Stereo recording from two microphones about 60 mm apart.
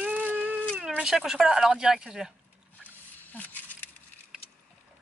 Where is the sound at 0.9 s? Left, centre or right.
Centre.